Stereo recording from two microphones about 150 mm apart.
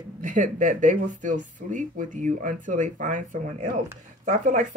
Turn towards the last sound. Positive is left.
turn(degrees=-55)  # may be behind; listen again after turning